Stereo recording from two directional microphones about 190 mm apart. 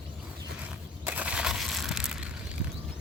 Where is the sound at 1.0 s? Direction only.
10° right (ahead or behind).